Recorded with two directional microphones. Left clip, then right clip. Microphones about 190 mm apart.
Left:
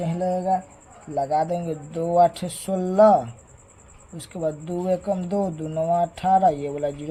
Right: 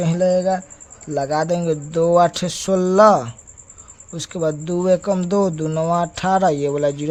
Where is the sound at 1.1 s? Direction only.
50° right (ahead or behind).